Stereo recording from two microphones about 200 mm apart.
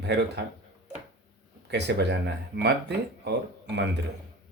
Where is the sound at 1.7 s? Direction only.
60° right (ahead or behind).